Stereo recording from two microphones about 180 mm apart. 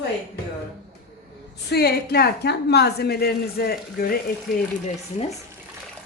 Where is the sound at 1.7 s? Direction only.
60° left (ahead or behind).